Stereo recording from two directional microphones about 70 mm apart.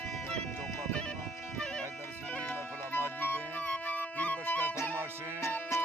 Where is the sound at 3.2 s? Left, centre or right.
Left.